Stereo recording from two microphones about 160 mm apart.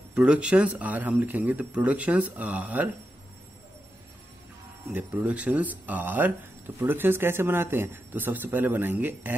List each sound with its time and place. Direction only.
0.1 s speech: 5° right (ahead or behind)
4.9 s speech: 10° right (ahead or behind)